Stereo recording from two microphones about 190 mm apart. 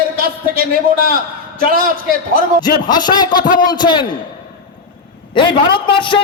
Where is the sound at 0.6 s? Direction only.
50° right (ahead or behind).